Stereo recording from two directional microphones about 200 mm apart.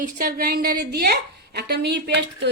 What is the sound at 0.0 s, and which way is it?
A woman's voice, 45° right (ahead or behind).